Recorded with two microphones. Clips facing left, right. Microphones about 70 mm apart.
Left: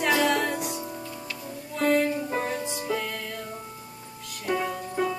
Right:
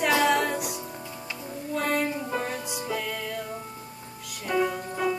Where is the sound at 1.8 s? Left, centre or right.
Centre.